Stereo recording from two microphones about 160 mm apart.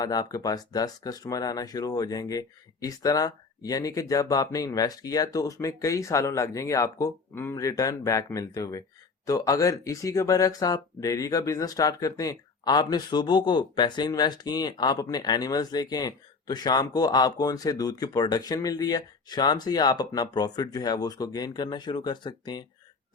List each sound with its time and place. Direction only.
0.0 s speech: 25° left (ahead or behind)